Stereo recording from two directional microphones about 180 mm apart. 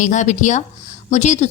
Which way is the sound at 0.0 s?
45° left (ahead or behind).